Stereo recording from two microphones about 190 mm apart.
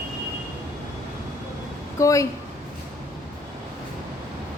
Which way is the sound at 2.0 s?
15° left (ahead or behind).